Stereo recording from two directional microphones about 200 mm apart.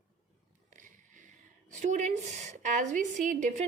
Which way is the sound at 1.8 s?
35° right (ahead or behind).